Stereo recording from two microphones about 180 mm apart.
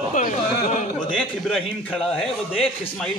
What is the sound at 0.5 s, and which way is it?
Speech, 50° left (ahead or behind).